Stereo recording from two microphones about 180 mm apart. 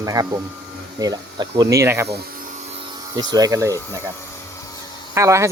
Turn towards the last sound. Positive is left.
turn(degrees=-15)  # may be behind; listen again after turning